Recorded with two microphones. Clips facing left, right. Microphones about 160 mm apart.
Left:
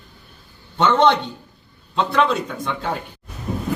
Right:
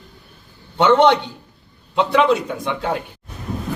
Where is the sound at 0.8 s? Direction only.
10° right (ahead or behind).